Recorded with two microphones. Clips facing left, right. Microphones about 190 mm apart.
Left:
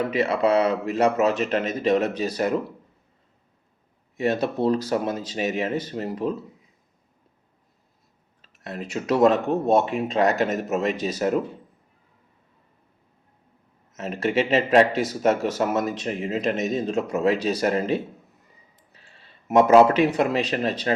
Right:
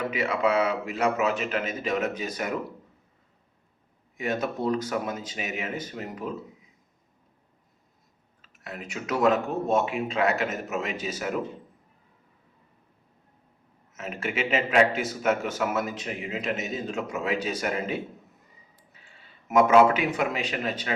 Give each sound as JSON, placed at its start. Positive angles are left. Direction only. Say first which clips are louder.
{"t": 0.1, "sound": "speech", "louder": "left 3 dB", "side_deg": 35}
{"t": 4.2, "sound": "speech", "louder": "left 5 dB", "side_deg": 35}
{"t": 8.4, "sound": "speech", "louder": "left 6 dB", "side_deg": 35}
{"t": 13.9, "sound": "speech", "louder": "left 8 dB", "side_deg": 35}
{"t": 18.9, "sound": "a sound", "louder": "left 2 dB", "side_deg": 35}
{"t": 20.1, "sound": "speech", "louder": "left 6 dB", "side_deg": 35}